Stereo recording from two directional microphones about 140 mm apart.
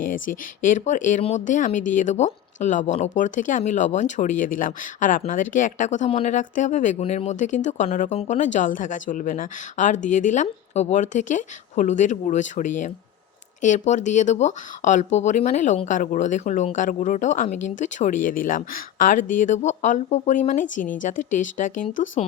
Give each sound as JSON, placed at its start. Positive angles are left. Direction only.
{"t": 0.0, "sound": "speech", "side_deg": 70}
{"t": 7.0, "sound": "speech", "side_deg": 50}